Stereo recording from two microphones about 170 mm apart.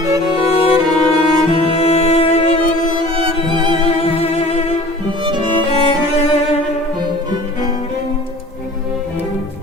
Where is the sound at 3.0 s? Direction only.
30° right (ahead or behind).